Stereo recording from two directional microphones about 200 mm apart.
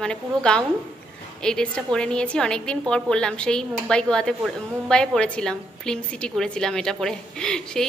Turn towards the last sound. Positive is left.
turn(degrees=5)  # may be behind; listen again after turning